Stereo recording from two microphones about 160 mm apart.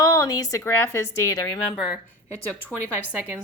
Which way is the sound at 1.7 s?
Centre (ahead or behind).